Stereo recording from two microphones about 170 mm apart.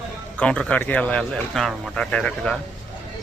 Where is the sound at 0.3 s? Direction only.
5° left (ahead or behind).